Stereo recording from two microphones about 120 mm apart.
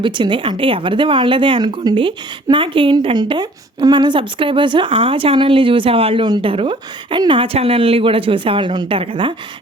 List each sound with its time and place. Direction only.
0.0 s speech: 40° right (ahead or behind)